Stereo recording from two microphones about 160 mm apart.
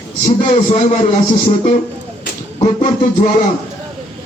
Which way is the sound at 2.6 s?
55° left (ahead or behind).